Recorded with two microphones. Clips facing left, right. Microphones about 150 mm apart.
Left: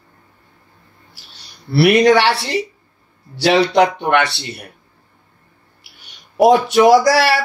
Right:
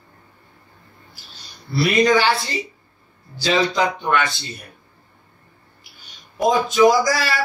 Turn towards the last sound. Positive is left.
turn(degrees=70)  # may be behind; listen again after turning